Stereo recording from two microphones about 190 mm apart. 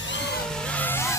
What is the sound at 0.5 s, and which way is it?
Vehicle, 5° left (ahead or behind).